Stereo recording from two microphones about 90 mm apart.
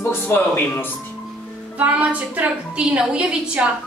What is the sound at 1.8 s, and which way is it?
A man's voice, 15° right (ahead or behind).